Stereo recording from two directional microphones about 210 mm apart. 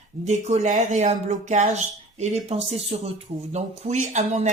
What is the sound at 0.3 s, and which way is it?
Speech, 35° right (ahead or behind).